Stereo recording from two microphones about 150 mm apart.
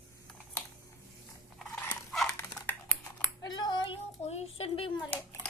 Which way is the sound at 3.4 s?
25° left (ahead or behind).